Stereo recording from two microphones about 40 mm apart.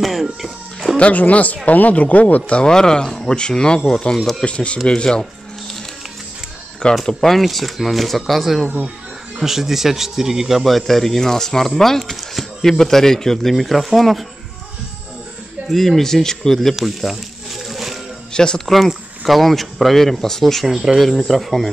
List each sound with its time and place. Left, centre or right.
0.0 s speech: centre
0.9 s speech: left
2.6 s speech: centre
4.4 s speech: left
7.1 s speech: centre
15.7 s speech: centre
16.5 s a sound: centre
18.3 s speech: left
18.7 s speech: centre
20.6 s speech: centre
21.0 s speech: centre